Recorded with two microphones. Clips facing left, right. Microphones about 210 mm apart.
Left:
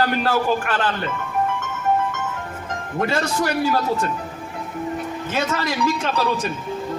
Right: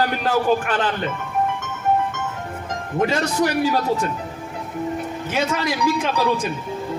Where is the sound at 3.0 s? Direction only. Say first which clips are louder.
Right 2 dB; 15° right (ahead or behind).